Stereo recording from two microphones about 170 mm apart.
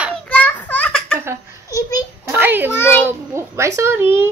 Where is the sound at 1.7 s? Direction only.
20° left (ahead or behind).